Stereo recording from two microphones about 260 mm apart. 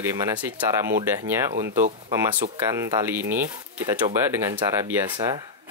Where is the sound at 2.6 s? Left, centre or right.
Centre.